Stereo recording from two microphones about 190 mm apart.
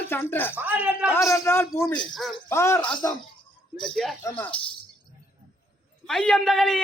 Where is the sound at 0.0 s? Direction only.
10° left (ahead or behind).